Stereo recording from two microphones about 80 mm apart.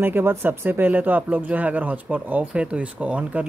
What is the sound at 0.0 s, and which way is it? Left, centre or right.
Speech, right.